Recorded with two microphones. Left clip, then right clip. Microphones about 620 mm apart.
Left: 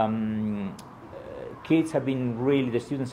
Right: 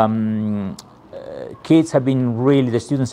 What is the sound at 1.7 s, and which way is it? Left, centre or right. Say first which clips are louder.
Speech: right 9 dB; right.